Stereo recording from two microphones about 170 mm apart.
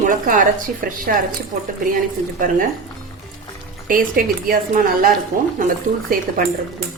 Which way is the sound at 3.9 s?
55° right (ahead or behind).